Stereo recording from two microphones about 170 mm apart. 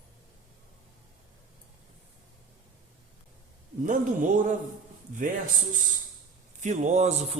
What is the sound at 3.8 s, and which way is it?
Speech, 50° right (ahead or behind).